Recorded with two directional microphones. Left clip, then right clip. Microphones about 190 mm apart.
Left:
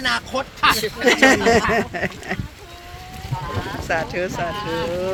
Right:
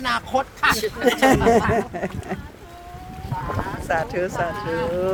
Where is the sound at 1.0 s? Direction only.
15° right (ahead or behind).